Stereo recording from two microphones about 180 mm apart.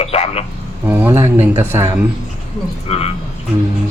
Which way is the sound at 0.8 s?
10° right (ahead or behind).